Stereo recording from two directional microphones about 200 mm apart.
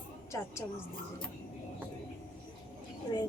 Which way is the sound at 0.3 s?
15° left (ahead or behind).